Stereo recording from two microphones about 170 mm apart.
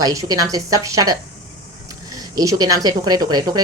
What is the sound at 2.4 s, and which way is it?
Speech, 20° right (ahead or behind).